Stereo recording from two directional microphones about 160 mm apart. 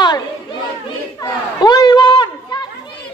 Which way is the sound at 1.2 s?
25° left (ahead or behind).